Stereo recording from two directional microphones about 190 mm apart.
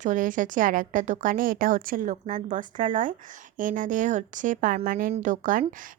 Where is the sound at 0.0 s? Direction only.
45° right (ahead or behind).